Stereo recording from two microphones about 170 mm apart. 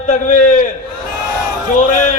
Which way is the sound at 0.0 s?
45° left (ahead or behind).